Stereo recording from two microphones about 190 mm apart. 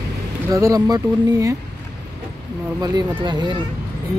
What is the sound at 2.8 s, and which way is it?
Speech, 20° right (ahead or behind).